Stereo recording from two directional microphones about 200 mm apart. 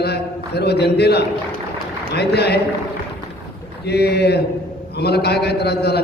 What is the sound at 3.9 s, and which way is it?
A man's voice, 55° left (ahead or behind).